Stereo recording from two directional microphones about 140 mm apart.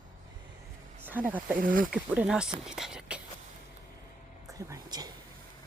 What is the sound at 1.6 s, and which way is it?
Speech, 80° right.